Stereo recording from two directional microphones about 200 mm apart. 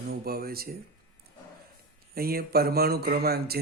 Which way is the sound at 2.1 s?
50° right (ahead or behind).